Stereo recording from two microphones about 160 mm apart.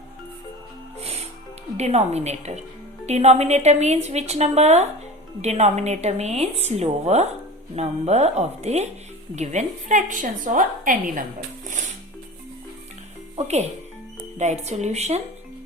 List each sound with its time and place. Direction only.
1.0 s music: 40° right (ahead or behind)
1.7 s a woman's voice: 45° right (ahead or behind); by 11.2 s 60° right (ahead or behind)
14.3 s speech: 45° right (ahead or behind)